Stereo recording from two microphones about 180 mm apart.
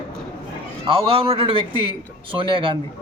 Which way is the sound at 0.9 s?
30° right (ahead or behind).